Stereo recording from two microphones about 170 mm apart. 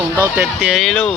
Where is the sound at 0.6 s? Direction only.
Centre (ahead or behind).